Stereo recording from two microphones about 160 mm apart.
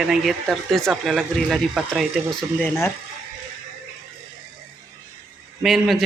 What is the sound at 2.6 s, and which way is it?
Speech, 15° left (ahead or behind).